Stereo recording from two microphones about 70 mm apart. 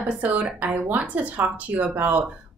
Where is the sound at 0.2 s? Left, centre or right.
Right.